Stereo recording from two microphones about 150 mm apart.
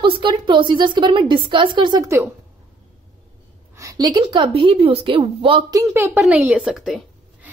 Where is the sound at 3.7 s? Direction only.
20° right (ahead or behind).